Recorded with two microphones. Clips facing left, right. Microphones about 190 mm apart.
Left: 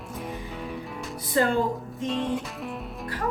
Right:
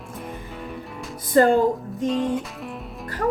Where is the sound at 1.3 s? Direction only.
45° right (ahead or behind).